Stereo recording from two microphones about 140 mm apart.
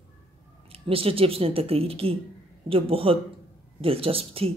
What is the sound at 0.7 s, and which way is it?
Speech, 40° right (ahead or behind).